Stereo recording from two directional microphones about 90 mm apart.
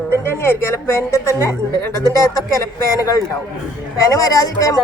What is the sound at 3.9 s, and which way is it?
Speech, 40° left (ahead or behind).